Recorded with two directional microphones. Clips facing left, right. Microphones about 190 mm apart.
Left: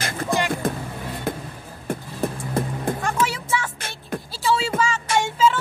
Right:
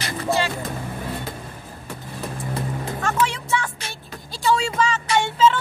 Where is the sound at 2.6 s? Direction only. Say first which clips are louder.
Left 6 dB; 50° left (ahead or behind).